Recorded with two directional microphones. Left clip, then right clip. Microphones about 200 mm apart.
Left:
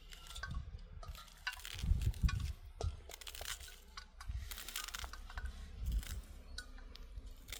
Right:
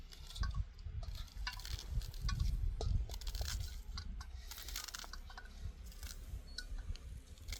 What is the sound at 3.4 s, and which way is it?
Coin, 40° left (ahead or behind).